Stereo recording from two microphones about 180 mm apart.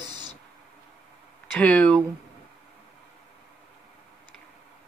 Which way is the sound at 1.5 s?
5° left (ahead or behind).